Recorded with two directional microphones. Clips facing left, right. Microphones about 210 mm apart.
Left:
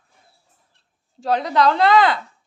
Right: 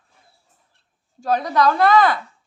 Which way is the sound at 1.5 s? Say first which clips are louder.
Even; 25° left (ahead or behind).